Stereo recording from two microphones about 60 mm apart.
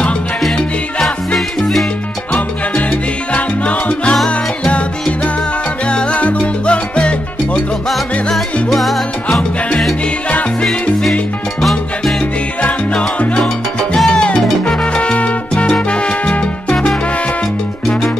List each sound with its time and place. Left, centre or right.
1.0 s music: centre
3.3 s salsa music: centre
4.3 s music: centre
5.9 s salsa music: centre
8.6 s music: centre
10.6 s salsa music: centre
12.6 s music: left
13.9 s salsa music: centre